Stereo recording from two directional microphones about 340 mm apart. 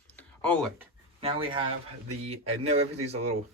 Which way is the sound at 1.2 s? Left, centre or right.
Centre.